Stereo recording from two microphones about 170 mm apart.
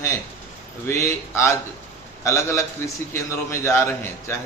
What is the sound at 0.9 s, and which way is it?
A man's voice, 15° left (ahead or behind).